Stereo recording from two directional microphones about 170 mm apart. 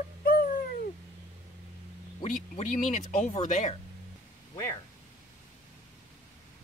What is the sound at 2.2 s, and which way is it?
Speech, 45° left (ahead or behind).